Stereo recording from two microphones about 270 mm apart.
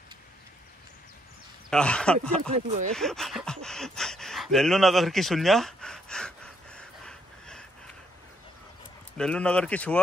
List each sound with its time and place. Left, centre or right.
1.7 s speech: centre
3.6 s gasp: centre
9.1 s speech: centre